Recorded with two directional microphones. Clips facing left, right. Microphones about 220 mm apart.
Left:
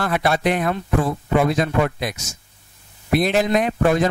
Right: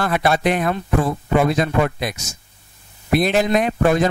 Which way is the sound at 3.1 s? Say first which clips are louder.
Right 1 dB; 15° right (ahead or behind).